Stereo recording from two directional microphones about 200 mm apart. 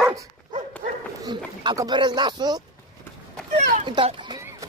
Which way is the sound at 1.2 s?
20° right (ahead or behind).